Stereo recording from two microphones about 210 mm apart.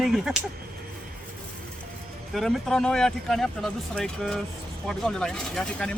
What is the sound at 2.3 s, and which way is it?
Speech, centre (ahead or behind).